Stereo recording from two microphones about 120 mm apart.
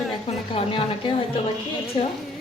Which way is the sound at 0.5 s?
45° left (ahead or behind).